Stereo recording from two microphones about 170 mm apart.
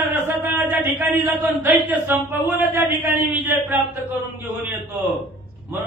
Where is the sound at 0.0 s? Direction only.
10° right (ahead or behind).